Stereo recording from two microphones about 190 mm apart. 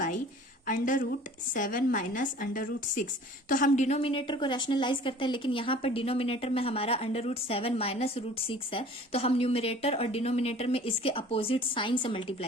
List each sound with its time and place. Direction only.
0.7 s a woman's voice: 45° left (ahead or behind); by 12.5 s 30° left (ahead or behind)